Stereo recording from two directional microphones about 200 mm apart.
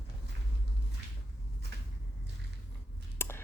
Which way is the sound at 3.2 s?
10° left (ahead or behind).